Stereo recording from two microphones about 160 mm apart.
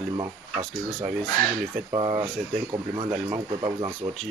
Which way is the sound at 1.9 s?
30° right (ahead or behind).